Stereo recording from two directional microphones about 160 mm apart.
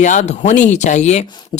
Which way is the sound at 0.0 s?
50° left (ahead or behind).